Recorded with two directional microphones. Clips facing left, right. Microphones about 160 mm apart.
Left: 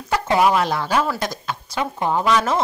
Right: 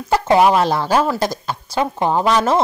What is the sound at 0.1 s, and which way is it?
Speech, 30° right (ahead or behind).